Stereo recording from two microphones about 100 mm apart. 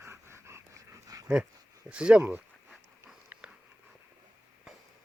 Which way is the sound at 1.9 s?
10° right (ahead or behind).